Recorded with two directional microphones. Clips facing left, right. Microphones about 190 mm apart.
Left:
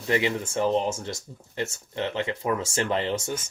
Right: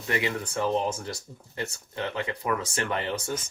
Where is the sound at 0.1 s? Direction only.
25° left (ahead or behind).